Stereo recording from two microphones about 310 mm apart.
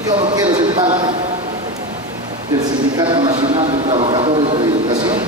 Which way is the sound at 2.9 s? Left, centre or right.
Centre.